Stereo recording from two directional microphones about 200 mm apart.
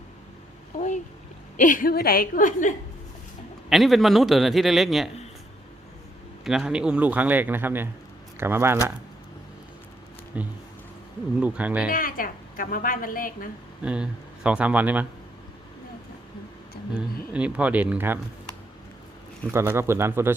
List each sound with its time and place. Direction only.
0.8 s a woman's voice: 35° left (ahead or behind)
3.7 s a man's voice: centre (ahead or behind)
6.4 s a man's voice: centre (ahead or behind)
10.3 s a man's voice: 5° right (ahead or behind)
11.9 s a woman's voice: 45° left (ahead or behind)
13.8 s a man's voice: 5° right (ahead or behind)
16.9 s a man's voice: 5° right (ahead or behind)
19.5 s a man's voice: 10° right (ahead or behind)